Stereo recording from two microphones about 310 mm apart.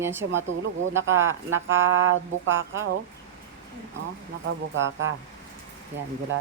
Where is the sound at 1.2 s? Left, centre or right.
Right.